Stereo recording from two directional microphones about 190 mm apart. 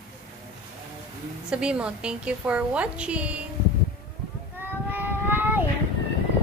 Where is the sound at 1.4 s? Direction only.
5° right (ahead or behind).